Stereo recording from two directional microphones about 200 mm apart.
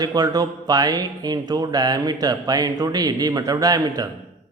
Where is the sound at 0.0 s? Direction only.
20° right (ahead or behind).